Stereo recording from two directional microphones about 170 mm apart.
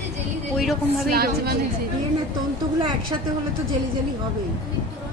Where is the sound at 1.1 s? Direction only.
65° right (ahead or behind).